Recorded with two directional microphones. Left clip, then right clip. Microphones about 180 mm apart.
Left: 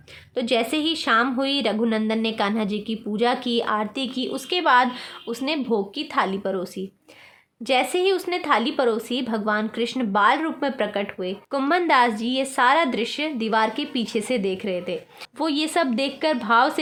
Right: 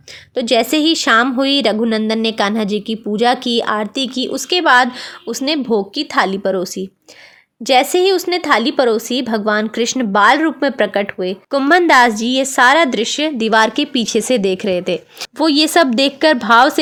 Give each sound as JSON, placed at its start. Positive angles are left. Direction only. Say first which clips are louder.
{"t": 0.3, "sound": "a woman's voice", "louder": "right 8 dB", "side_deg": -35}